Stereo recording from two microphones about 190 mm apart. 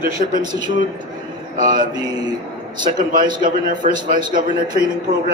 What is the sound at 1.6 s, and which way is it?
Speech, 45° right (ahead or behind).